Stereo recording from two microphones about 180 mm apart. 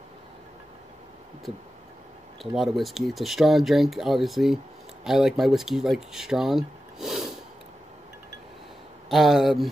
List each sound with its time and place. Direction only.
2.5 s speech: centre (ahead or behind)
9.1 s speech: centre (ahead or behind)